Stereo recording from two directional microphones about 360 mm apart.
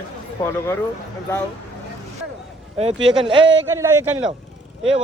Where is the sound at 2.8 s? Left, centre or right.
Centre.